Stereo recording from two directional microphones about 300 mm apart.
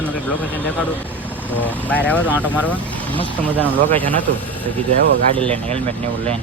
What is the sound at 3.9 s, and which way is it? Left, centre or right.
Speech, centre.